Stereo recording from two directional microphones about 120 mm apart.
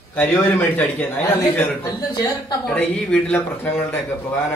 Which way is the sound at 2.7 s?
10° left (ahead or behind).